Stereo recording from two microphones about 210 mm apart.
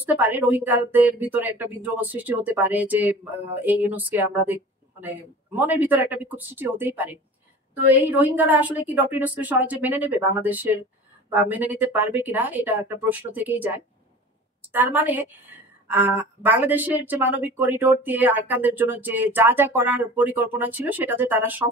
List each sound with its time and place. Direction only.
0.0 s speech: 10° right (ahead or behind)